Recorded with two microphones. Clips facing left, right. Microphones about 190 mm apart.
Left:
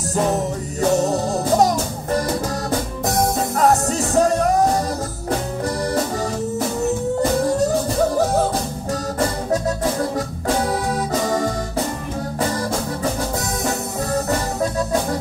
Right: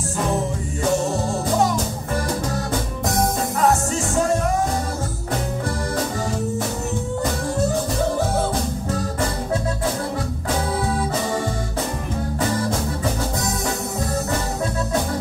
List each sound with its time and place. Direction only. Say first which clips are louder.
1.6 s music: left 3 dB; 40° left (ahead or behind)
3.5 s music: left 3 dB; 40° left (ahead or behind)